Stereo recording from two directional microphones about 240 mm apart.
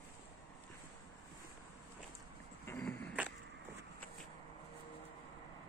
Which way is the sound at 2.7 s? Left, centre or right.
Centre.